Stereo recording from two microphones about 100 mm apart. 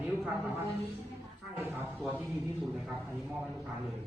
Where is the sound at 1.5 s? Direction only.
20° right (ahead or behind).